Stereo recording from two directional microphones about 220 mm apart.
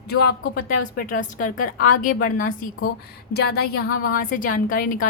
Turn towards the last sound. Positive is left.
turn(degrees=40)  # may be behind; listen again after turning